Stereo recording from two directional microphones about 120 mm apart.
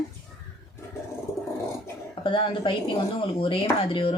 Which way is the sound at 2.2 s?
45° left (ahead or behind).